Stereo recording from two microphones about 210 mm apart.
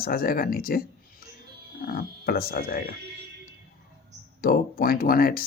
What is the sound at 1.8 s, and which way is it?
Speech, 45° left (ahead or behind).